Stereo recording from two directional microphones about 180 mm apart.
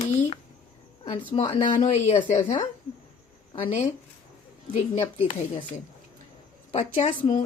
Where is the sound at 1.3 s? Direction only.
35° left (ahead or behind).